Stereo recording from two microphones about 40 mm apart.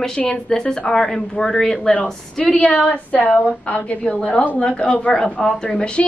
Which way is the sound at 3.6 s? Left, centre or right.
Left.